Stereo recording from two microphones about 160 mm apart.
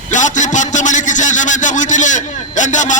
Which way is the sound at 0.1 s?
50° left (ahead or behind).